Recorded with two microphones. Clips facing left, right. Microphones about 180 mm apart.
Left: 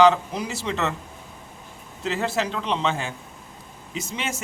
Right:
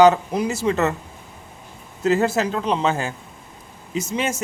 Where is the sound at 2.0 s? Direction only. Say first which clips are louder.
Right 7 dB; 45° right (ahead or behind).